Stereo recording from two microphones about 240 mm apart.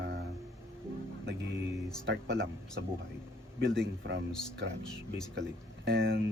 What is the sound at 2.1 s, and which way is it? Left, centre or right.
A man's voice, right.